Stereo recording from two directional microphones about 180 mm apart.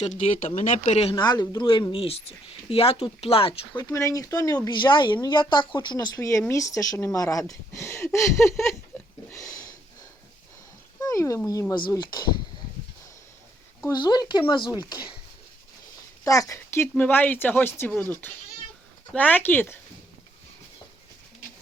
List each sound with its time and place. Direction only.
0.0 s speech: 35° left (ahead or behind)
1.1 s speech: 20° left (ahead or behind)
9.3 s a sound: 20° left (ahead or behind)
11.0 s speech: 15° left (ahead or behind)
13.9 s speech: 25° left (ahead or behind)
16.2 s speech: 20° left (ahead or behind)